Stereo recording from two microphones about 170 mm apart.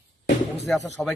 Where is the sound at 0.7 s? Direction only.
Centre (ahead or behind).